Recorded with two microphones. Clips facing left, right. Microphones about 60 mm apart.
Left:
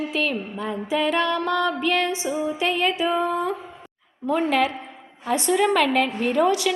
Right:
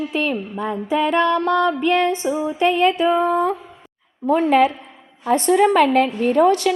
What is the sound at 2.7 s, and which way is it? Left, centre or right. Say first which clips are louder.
A woman's voice: right 8 dB; centre.